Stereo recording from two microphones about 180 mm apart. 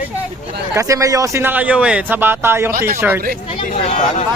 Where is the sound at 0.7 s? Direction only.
20° right (ahead or behind).